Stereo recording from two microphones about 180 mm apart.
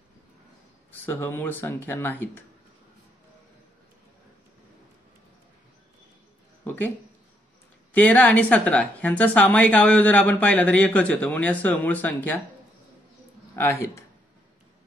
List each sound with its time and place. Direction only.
1.0 s a woman's voice: 15° left (ahead or behind)
6.6 s a sound: 10° left (ahead or behind)
7.9 s a woman's voice: 10° left (ahead or behind)
13.6 s a woman's voice: 15° left (ahead or behind)